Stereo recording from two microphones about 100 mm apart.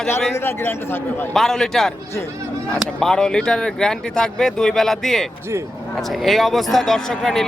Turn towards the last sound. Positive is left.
turn(degrees=5)  # may be behind; listen again after turning